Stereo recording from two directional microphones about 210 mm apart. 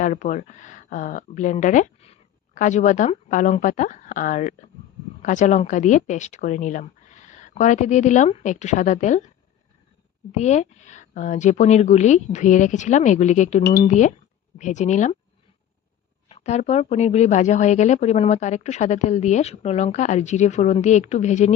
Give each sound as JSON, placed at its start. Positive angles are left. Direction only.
{"t": 0.0, "sound": "speech", "side_deg": 35}
{"t": 10.3, "sound": "speech", "side_deg": 35}
{"t": 16.3, "sound": "speech", "side_deg": 30}